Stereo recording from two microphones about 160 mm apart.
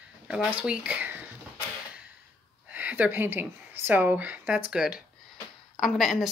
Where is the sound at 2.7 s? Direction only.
10° right (ahead or behind).